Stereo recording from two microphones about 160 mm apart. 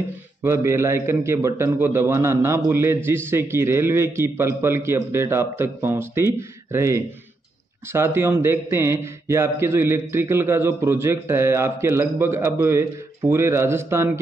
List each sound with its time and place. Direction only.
0.4 s a man's voice: 15° right (ahead or behind)